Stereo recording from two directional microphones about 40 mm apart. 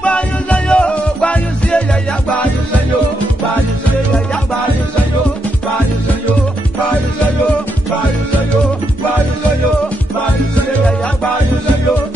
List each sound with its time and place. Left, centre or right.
0.0 s music: left